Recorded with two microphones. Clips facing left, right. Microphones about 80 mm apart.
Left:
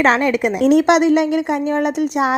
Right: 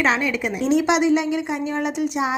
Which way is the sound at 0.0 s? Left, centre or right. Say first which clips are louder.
Left 6 dB; left.